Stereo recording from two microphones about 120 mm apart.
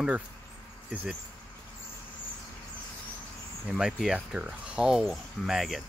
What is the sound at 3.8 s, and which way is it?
Speech, 5° right (ahead or behind).